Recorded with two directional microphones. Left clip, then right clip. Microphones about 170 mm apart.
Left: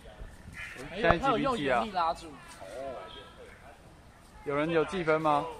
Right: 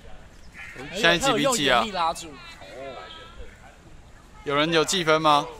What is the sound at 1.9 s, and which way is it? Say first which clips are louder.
Speech: right 4 dB; 50° right (ahead or behind).